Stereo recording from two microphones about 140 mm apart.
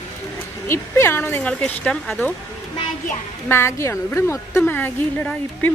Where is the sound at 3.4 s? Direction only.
15° left (ahead or behind).